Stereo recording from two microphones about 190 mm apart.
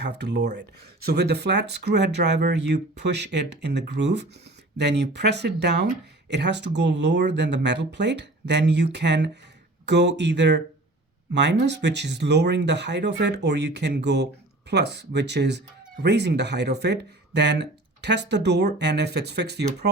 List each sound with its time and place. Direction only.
1.0 s speech: 60° right (ahead or behind)